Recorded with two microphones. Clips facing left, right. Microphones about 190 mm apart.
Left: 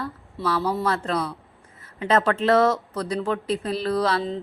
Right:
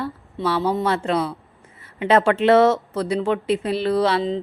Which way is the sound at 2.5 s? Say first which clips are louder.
Right 4 dB; 25° right (ahead or behind).